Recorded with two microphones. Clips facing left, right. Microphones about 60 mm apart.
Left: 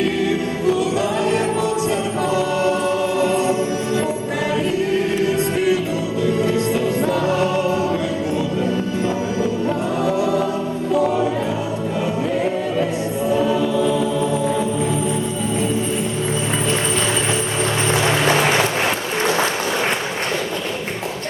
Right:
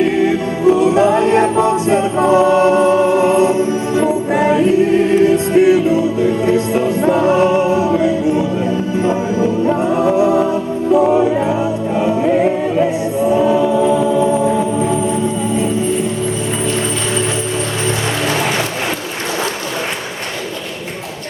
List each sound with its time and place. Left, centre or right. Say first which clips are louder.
0.0 s music: right 5 dB; right